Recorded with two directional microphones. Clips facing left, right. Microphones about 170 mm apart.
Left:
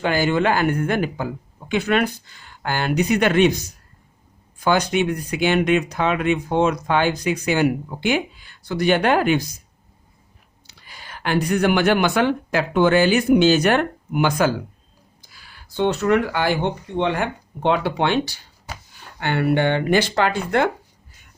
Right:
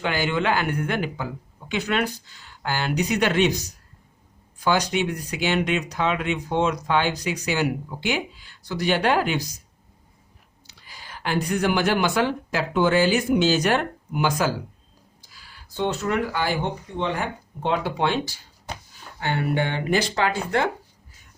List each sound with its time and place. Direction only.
0.0 s speech: 40° left (ahead or behind)
4.6 s speech: 55° left (ahead or behind)
10.7 s speech: 65° left (ahead or behind)